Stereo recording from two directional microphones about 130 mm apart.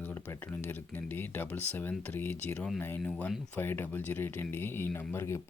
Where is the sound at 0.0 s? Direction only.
15° left (ahead or behind).